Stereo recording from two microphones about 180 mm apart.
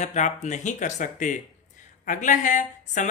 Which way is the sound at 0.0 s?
40° left (ahead or behind).